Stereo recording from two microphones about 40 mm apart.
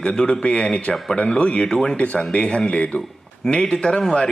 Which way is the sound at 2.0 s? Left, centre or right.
Left.